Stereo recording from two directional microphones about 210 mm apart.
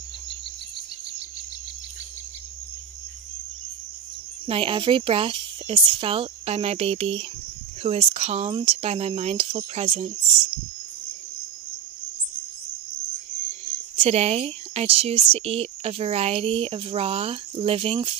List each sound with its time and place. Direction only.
4.5 s speech: 25° right (ahead or behind)
13.7 s speech: 30° right (ahead or behind)